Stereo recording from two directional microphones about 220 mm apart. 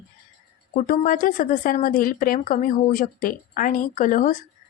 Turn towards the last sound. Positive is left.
turn(degrees=35)  # may be behind; listen again after turning